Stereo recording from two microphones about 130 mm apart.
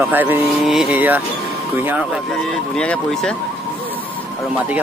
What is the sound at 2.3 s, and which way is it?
Speech, 5° left (ahead or behind).